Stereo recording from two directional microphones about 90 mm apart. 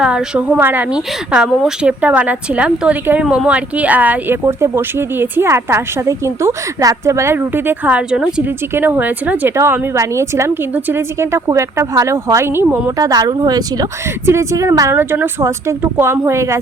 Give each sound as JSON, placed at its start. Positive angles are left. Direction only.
{"t": 0.0, "sound": "a woman's voice", "side_deg": -10}
{"t": 0.9, "sound": "a woman's voice", "side_deg": -10}
{"t": 4.4, "sound": "a woman's voice", "side_deg": -30}
{"t": 8.7, "sound": "a woman's voice", "side_deg": -25}
{"t": 9.6, "sound": "speech", "side_deg": -30}
{"t": 13.0, "sound": "speech", "side_deg": -45}
{"t": 14.3, "sound": "speech", "side_deg": -35}